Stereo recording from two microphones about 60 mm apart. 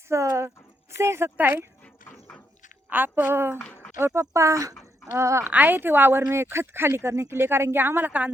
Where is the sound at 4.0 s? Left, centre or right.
Right.